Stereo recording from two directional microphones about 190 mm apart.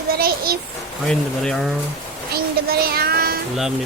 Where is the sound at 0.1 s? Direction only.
50° right (ahead or behind).